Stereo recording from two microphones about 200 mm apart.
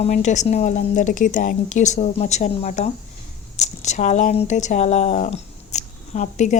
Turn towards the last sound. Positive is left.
turn(degrees=35)  # may be behind; listen again after turning